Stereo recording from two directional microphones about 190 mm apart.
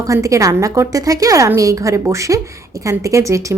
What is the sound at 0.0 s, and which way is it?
A woman's voice, 15° right (ahead or behind).